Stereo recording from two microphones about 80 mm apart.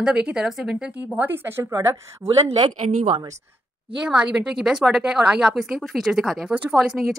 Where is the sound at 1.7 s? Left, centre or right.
Right.